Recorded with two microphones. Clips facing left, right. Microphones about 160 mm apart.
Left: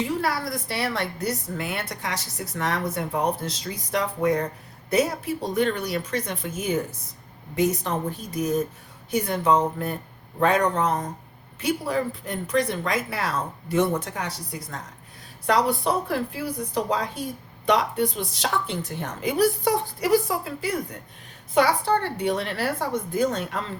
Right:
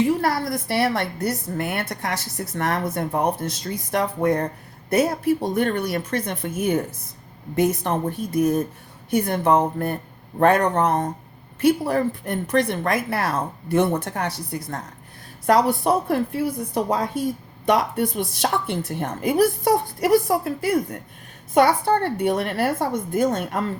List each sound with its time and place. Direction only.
0.2 s a woman's voice: 50° right (ahead or behind)